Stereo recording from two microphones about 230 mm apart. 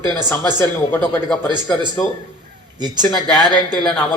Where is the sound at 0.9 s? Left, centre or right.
Centre.